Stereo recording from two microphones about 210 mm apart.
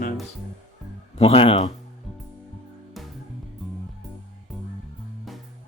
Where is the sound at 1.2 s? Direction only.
25° left (ahead or behind).